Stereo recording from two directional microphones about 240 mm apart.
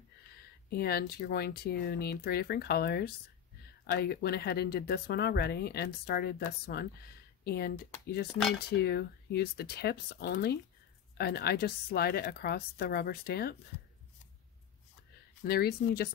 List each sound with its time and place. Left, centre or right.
0.7 s speech: left
15.4 s speech: left